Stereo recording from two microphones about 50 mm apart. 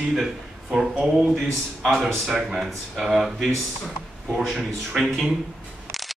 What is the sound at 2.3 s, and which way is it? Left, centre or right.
A man's voice, centre.